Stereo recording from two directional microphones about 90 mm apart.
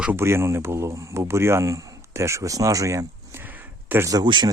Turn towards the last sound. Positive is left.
turn(degrees=-55)  # may be behind; listen again after turning